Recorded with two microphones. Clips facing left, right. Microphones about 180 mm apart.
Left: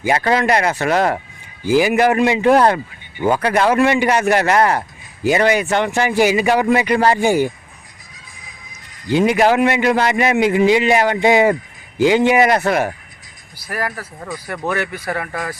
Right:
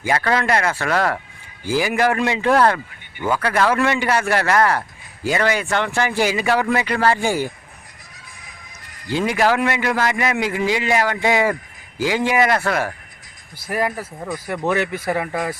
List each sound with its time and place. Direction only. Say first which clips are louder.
0.0 s a man's voice: left 3 dB; 20° left (ahead or behind)
9.0 s a man's voice: left 5 dB; 20° left (ahead or behind)
13.7 s speech: right 2 dB; 20° right (ahead or behind)